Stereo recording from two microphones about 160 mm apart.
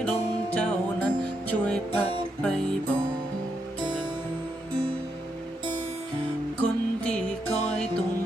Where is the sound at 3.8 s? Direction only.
30° right (ahead or behind).